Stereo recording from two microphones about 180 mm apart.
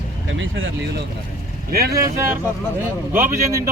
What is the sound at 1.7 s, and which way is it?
Speech, 60° right (ahead or behind).